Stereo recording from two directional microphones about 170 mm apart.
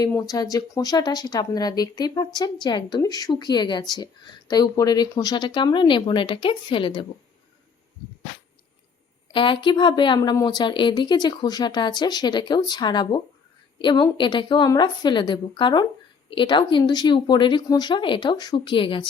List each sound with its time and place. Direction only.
0.0 s speech: 20° left (ahead or behind)
9.3 s speech: 30° left (ahead or behind)